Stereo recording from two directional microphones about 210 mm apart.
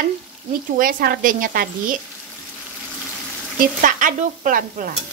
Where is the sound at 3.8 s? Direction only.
40° right (ahead or behind).